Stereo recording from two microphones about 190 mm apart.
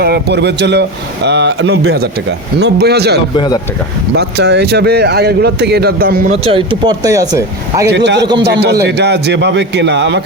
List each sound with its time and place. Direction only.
0.0 s speech: 60° right (ahead or behind); by 2.0 s 80° right
2.6 s speech: 60° right (ahead or behind)
3.3 s speech: 25° left (ahead or behind)
4.1 s speech: 60° right (ahead or behind)
6.4 s speech: 30° right (ahead or behind)
7.9 s speech: 65° right (ahead or behind)